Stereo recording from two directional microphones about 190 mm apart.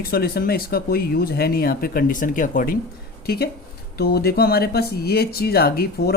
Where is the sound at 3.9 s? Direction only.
55° left (ahead or behind).